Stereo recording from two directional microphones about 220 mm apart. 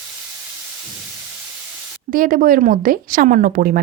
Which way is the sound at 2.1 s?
40° right (ahead or behind).